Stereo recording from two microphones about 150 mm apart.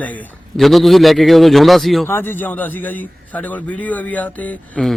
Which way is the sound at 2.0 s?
15° left (ahead or behind).